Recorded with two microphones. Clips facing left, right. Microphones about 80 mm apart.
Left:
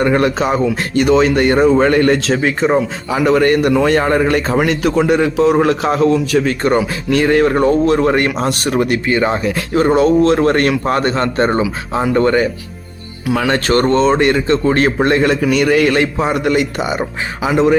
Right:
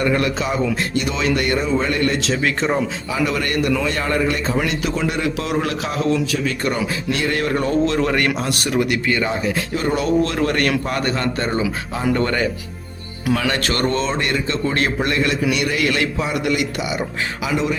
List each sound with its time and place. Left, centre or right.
0.0 s a man's voice: left
1.5 s a man's voice: left
2.4 s speech: centre
3.1 s a man's voice: left
4.2 s a man's voice: left
7.9 s speech: left
8.4 s a man's voice: left
9.0 s a man's voice: left
12.1 s speech: left
13.5 s a man's voice: left